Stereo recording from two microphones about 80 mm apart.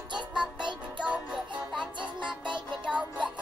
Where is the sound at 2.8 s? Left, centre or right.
Centre.